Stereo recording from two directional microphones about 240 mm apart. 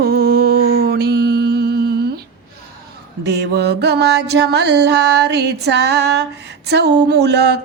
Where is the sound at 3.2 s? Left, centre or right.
Right.